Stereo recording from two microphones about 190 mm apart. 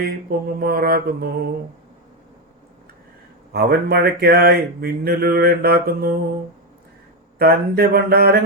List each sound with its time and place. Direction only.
0.0 s speech: 55° right (ahead or behind)
3.5 s speech: 55° right (ahead or behind)
7.3 s speech: 55° right (ahead or behind)